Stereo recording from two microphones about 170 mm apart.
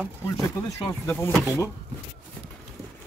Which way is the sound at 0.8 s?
10° left (ahead or behind).